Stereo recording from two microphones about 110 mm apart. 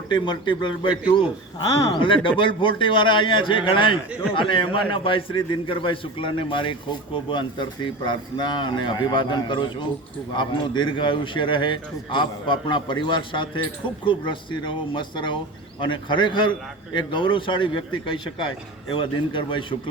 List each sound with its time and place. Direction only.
0.1 s a man's voice: 45° left (ahead or behind)